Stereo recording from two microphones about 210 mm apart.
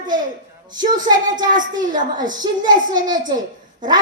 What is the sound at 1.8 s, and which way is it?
Speech, 40° right (ahead or behind).